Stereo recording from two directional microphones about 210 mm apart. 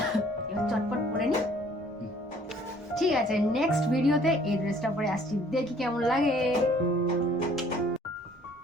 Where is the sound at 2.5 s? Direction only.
Centre (ahead or behind).